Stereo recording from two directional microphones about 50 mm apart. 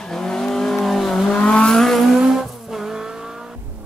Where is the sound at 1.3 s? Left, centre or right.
Left.